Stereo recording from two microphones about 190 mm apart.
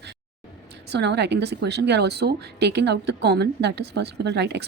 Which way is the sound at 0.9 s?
60° right (ahead or behind).